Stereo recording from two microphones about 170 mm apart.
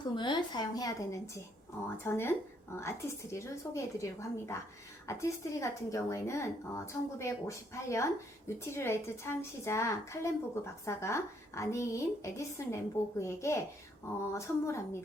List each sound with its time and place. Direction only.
0.0 s a woman's voice: 25° left (ahead or behind)